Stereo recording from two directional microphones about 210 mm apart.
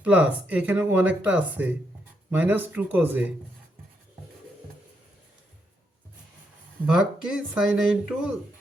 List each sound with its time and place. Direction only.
0.0 s speech: 5° right (ahead or behind)
6.9 s speech: 5° right (ahead or behind)